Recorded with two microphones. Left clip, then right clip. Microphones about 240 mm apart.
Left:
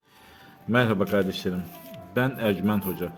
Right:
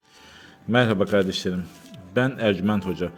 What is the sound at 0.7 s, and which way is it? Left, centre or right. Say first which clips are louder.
Speech: right 3 dB; centre.